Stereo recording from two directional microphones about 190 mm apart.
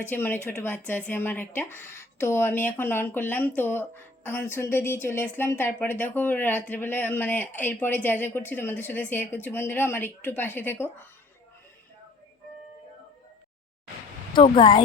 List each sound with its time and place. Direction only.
0.1 s a woman's voice: 10° left (ahead or behind)
14.3 s speech: 25° left (ahead or behind)